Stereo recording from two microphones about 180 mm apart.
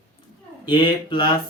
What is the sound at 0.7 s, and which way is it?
Speech, 25° left (ahead or behind).